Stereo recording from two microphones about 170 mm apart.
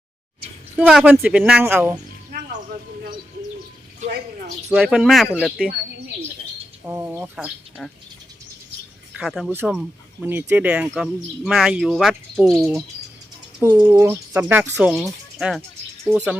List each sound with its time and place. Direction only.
0.8 s speech: 5° right (ahead or behind)
4.0 s a sound: 45° right (ahead or behind)
4.7 s speech: 5° right (ahead or behind)
6.8 s speech: 15° right (ahead or behind)
9.1 s speech: centre (ahead or behind)
13.6 s speech: 15° right (ahead or behind)